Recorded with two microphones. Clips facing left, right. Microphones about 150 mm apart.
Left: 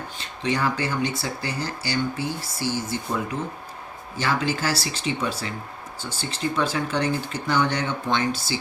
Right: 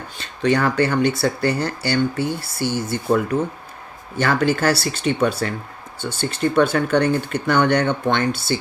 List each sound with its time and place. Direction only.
0.2 s speech: 65° right (ahead or behind)